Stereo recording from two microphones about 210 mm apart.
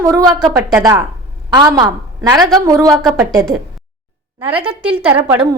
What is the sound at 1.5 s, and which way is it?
A woman's voice, 20° right (ahead or behind).